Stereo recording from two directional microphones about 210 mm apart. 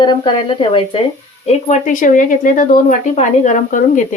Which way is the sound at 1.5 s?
35° left (ahead or behind).